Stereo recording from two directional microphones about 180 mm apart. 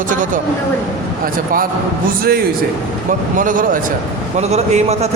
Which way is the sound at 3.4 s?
50° right (ahead or behind).